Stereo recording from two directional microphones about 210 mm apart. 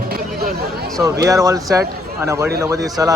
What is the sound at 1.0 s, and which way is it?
Speech, 15° right (ahead or behind).